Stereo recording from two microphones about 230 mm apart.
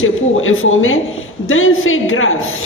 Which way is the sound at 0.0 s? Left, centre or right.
Left.